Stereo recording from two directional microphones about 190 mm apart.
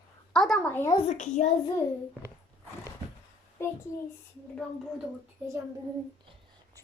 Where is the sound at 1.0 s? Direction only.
40° left (ahead or behind).